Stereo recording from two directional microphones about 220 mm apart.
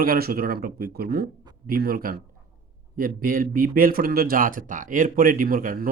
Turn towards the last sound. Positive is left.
turn(degrees=-40)  # may be behind; listen again after turning